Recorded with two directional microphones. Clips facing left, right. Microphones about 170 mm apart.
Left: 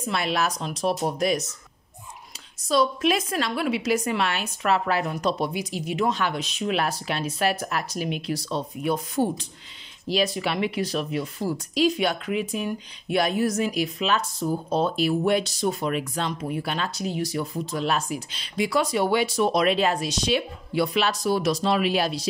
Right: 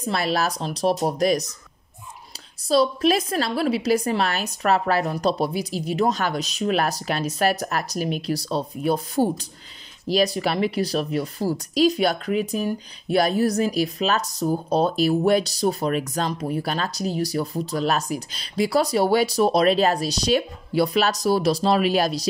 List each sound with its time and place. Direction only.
0.0 s speech: 35° right (ahead or behind)
2.7 s speech: 35° right (ahead or behind)